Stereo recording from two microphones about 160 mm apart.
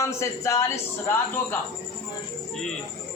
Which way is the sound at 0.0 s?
20° left (ahead or behind).